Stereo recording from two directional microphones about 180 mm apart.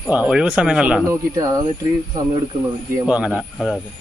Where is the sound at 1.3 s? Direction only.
20° right (ahead or behind).